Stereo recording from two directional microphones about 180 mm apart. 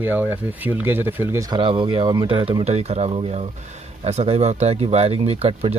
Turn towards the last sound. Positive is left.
turn(degrees=-35)  # may be behind; listen again after turning